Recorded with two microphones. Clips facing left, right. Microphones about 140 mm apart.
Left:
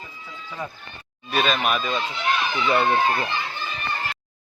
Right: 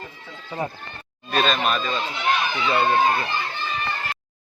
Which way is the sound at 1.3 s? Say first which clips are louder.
Right 1 dB; 5° left (ahead or behind).